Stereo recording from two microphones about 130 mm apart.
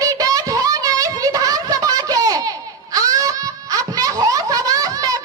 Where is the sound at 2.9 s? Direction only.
25° right (ahead or behind).